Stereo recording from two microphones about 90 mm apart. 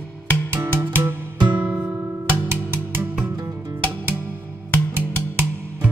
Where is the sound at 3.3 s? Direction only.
45° right (ahead or behind).